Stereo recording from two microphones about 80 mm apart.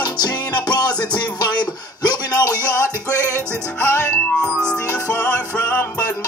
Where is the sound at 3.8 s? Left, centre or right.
Left.